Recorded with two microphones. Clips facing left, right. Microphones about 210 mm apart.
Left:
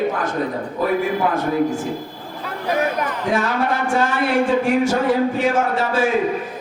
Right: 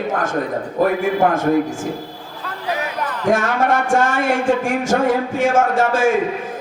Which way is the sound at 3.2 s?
45° right (ahead or behind).